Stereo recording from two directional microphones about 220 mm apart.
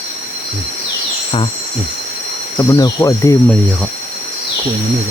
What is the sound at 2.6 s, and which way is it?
Speech, 15° left (ahead or behind).